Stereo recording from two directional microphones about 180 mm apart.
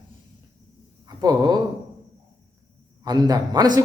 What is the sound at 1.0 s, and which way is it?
Speech, 20° right (ahead or behind).